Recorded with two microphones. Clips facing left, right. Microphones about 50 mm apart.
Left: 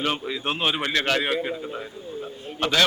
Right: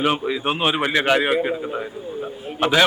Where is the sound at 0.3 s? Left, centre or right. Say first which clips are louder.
Right 4 dB; centre.